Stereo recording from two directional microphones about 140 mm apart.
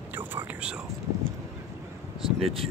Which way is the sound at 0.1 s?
15° right (ahead or behind).